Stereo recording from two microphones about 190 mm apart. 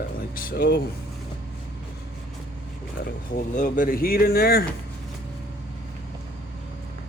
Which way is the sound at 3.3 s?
45° left (ahead or behind).